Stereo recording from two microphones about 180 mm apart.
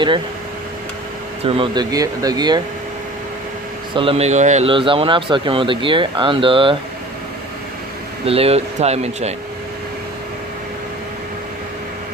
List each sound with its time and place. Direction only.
1.5 s speech: 30° right (ahead or behind)
3.9 s speech: 30° right (ahead or behind)
8.2 s speech: 35° right (ahead or behind)